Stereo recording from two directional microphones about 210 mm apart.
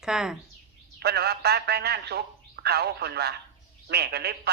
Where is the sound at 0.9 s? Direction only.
50° right (ahead or behind).